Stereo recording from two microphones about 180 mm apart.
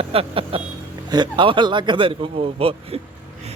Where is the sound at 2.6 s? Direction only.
30° right (ahead or behind).